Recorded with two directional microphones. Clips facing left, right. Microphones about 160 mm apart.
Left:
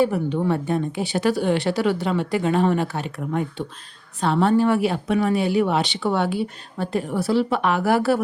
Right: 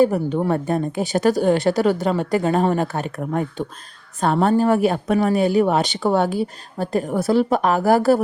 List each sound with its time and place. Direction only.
0.0 s speech: 40° right (ahead or behind)